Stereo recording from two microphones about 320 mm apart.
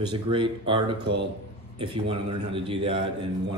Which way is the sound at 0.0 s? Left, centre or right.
Centre.